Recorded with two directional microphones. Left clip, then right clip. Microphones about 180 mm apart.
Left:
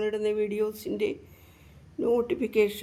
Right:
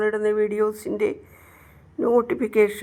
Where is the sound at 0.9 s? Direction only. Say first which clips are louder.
Right 5 dB; 60° right (ahead or behind).